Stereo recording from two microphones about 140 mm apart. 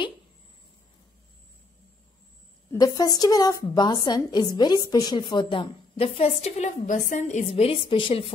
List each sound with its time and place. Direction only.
2.7 s a woman's voice: 25° left (ahead or behind); by 8.3 s 40° left (ahead or behind)